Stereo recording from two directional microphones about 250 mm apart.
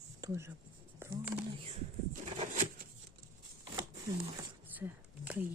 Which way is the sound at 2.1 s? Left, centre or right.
Right.